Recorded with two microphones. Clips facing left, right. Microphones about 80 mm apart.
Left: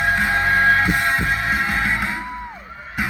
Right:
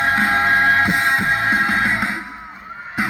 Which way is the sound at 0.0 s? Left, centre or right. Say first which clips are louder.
Right 2 dB; right.